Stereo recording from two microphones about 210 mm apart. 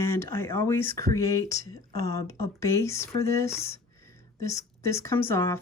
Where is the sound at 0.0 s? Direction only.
10° left (ahead or behind).